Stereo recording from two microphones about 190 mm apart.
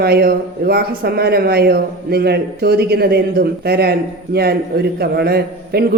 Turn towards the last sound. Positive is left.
turn(degrees=-55)  # may be behind; listen again after turning